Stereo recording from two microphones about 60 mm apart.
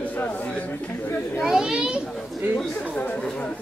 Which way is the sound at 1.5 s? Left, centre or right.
Centre.